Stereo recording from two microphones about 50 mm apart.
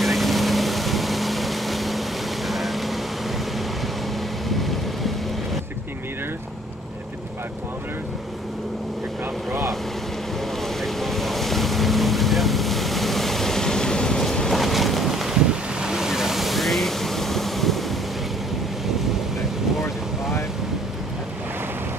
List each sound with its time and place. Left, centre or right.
0.0 s vehicle: centre
4.5 s wind noise: centre
9.5 s vehicle: right
10.8 s boat: centre
14.5 s boat: centre